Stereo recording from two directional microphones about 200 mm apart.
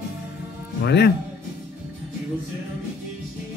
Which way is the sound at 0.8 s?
55° left (ahead or behind).